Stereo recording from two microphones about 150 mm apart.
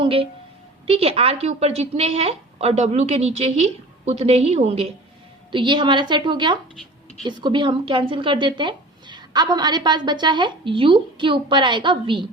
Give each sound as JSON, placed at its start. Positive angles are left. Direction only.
{"t": 0.0, "sound": "a woman's voice", "side_deg": -35}
{"t": 5.5, "sound": "a woman's voice", "side_deg": -30}
{"t": 6.7, "sound": "a sound", "side_deg": 5}
{"t": 7.3, "sound": "a woman's voice", "side_deg": -30}